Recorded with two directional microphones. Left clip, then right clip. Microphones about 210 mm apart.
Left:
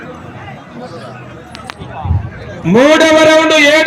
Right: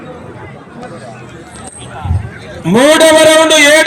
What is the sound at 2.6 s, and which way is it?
A man's voice, 40° right (ahead or behind).